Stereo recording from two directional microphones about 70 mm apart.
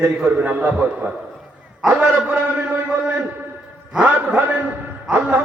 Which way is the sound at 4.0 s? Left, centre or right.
Right.